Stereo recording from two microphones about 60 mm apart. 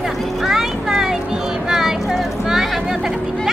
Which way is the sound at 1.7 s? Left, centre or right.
Centre.